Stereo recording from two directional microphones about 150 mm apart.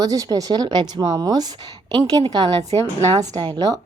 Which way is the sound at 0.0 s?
25° right (ahead or behind).